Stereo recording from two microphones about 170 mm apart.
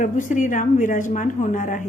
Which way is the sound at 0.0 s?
50° left (ahead or behind).